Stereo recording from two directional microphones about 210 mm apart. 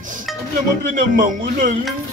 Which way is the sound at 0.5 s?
40° right (ahead or behind).